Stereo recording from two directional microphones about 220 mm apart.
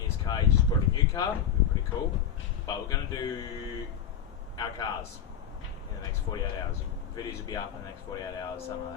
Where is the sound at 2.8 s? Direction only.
15° left (ahead or behind).